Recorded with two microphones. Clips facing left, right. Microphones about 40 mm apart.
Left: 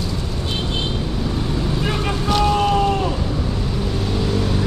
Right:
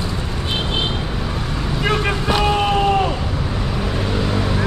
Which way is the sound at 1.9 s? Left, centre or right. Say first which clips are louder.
Right 5 dB; right.